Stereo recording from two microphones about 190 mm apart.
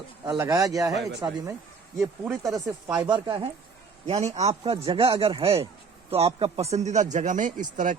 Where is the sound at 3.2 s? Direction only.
25° right (ahead or behind).